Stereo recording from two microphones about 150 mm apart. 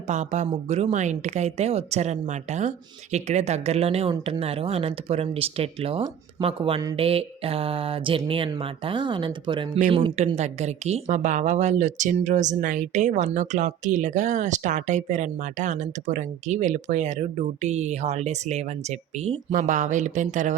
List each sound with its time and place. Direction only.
0.1 s speech: 50° right (ahead or behind); by 9.6 s 35° right (ahead or behind)
9.9 s speech: 45° right (ahead or behind)